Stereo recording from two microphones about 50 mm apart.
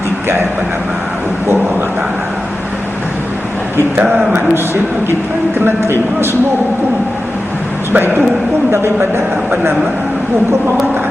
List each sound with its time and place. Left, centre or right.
4.5 s speech: right
7.9 s speech: right
8.7 s speech: right